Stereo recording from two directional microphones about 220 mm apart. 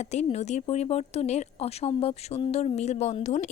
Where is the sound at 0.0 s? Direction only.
30° left (ahead or behind).